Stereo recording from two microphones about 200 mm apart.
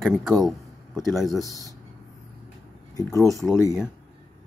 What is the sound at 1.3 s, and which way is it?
Speech, 15° left (ahead or behind).